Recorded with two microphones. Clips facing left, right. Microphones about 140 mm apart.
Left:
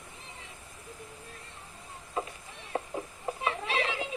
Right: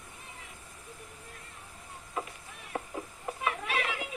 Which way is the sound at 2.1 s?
25° left (ahead or behind).